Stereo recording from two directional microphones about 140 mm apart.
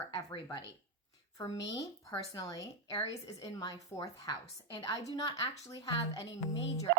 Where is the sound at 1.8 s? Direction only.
25° left (ahead or behind).